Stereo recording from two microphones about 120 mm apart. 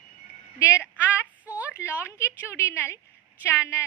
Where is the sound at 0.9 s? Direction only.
15° right (ahead or behind).